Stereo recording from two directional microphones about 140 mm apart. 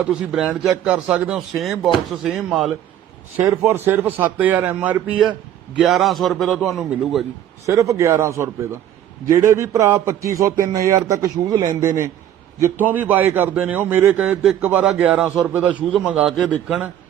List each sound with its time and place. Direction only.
0.3 s a man's voice: 5° right (ahead or behind)
7.7 s a man's voice: 20° right (ahead or behind); by 16.9 s centre (ahead or behind)